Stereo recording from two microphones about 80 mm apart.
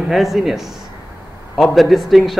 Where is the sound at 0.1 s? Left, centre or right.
Centre.